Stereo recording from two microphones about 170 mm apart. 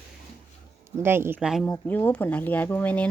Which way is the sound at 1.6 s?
10° left (ahead or behind).